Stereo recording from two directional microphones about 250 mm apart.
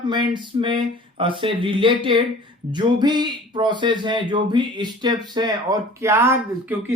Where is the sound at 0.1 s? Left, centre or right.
Centre.